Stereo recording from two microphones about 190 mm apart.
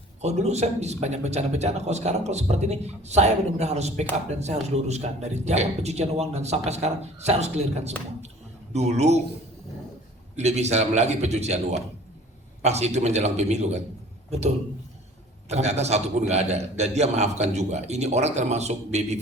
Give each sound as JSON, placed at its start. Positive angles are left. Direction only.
{"t": 0.2, "sound": "speech", "side_deg": -35}
{"t": 10.3, "sound": "a man's voice", "side_deg": -35}